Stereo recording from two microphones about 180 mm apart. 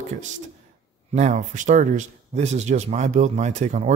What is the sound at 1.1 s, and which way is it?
Speech, 40° right (ahead or behind).